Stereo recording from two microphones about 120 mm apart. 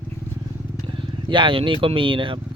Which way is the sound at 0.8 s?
45° right (ahead or behind).